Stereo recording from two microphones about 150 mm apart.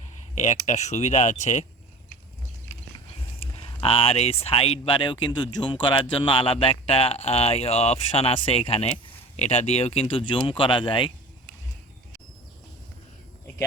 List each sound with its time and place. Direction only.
0.3 s speech: 55° left (ahead or behind)
3.4 s speech: 40° left (ahead or behind)